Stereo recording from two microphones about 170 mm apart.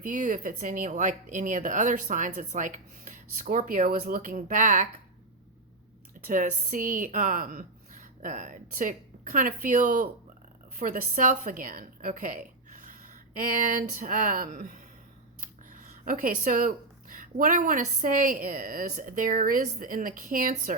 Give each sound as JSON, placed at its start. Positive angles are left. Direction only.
{"t": 0.0, "sound": "a woman's voice", "side_deg": -50}
{"t": 6.2, "sound": "a woman's voice", "side_deg": -50}